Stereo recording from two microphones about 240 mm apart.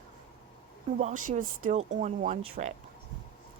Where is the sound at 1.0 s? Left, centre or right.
Right.